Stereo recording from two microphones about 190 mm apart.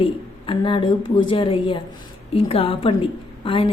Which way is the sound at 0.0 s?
25° left (ahead or behind).